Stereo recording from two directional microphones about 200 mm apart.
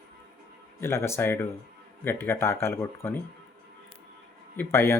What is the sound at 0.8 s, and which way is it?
Speech, 15° left (ahead or behind).